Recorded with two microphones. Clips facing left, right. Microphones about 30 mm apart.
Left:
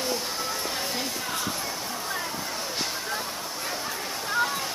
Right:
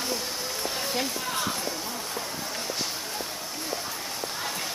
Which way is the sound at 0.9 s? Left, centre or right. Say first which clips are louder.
Right 1 dB; centre.